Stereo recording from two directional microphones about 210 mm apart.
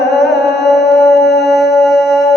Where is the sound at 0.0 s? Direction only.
50° left (ahead or behind).